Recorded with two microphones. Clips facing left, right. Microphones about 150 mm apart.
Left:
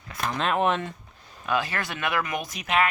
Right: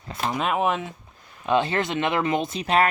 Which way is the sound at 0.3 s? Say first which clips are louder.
Even; 5° right (ahead or behind).